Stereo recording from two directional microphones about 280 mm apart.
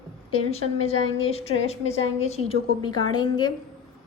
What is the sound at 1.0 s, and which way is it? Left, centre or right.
Speech, left.